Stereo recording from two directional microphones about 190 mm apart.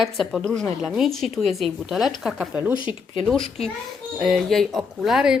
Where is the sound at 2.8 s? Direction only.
25° left (ahead or behind).